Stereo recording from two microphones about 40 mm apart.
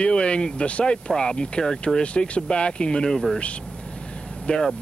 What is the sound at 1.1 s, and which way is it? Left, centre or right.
Speech, centre.